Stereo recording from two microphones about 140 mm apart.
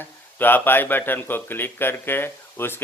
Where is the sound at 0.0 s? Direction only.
15° left (ahead or behind).